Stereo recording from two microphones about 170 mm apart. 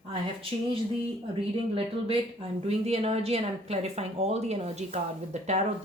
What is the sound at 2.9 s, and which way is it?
A woman's voice, 35° right (ahead or behind).